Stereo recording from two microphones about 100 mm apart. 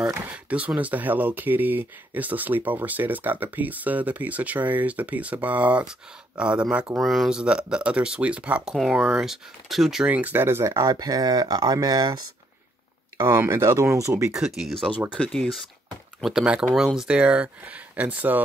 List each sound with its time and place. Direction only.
0.1 s speech: 15° right (ahead or behind); by 10.0 s centre (ahead or behind)
10.0 s speech: 15° right (ahead or behind); by 12.2 s 40° right (ahead or behind)
13.2 s speech: 30° right (ahead or behind)
14.3 s speech: 5° right (ahead or behind)
15.1 s speech: 10° left (ahead or behind)
16.2 s speech: 5° right (ahead or behind)